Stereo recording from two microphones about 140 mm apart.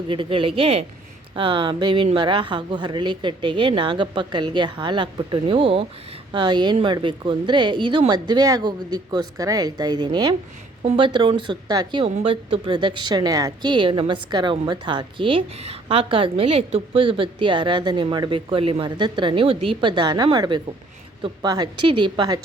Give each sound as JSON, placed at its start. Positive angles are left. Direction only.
{"t": 0.1, "sound": "speech", "side_deg": -40}